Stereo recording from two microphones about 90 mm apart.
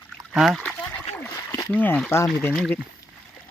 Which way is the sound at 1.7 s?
20° left (ahead or behind).